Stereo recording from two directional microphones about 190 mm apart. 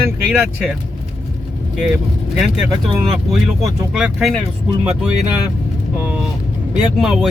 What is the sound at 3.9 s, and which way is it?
Speech, centre (ahead or behind).